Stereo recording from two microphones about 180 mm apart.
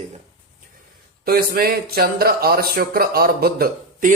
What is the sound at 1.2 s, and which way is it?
Speech, 55° right (ahead or behind).